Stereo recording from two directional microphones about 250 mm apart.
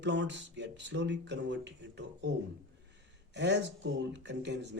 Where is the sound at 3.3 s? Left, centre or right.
Right.